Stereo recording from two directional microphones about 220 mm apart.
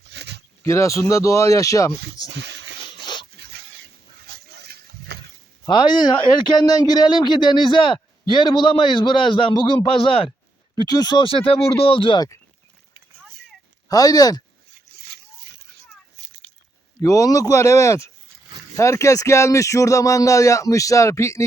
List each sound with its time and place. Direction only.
0.0 s a sound: 50° right (ahead or behind)
0.6 s speech: 15° left (ahead or behind)
2.3 s a sound: 50° right (ahead or behind)
3.0 s dog: 20° left (ahead or behind)
3.3 s dog: 50° right (ahead or behind)
4.3 s a sound: 50° right (ahead or behind)
5.6 s a man's voice: 20° left (ahead or behind)
13.8 s speech: 15° left (ahead or behind)
14.9 s splash: 45° right (ahead or behind)
17.0 s speech: 15° left (ahead or behind)